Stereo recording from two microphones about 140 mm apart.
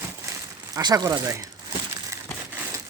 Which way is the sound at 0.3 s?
30° right (ahead or behind).